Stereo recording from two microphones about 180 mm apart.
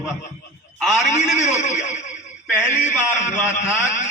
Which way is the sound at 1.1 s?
40° left (ahead or behind).